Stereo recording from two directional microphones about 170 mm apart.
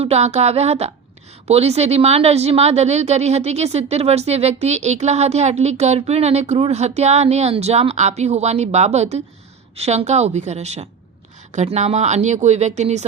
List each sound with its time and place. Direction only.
0.0 s a woman's voice: 40° right (ahead or behind)